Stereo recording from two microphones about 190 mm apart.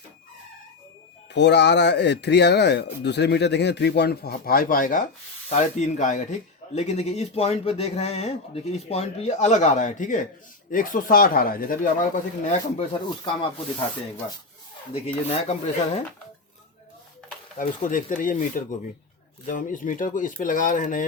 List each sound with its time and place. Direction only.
1.3 s speech: 65° left (ahead or behind); by 12.5 s 45° left (ahead or behind)
12.9 s speech: 25° left (ahead or behind)
15.0 s speech: 35° left (ahead or behind)
17.6 s speech: 40° left (ahead or behind)